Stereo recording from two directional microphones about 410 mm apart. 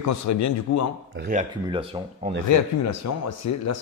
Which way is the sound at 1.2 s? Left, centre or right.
Centre.